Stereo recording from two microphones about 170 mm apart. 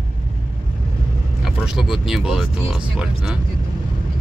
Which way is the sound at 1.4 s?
Centre (ahead or behind).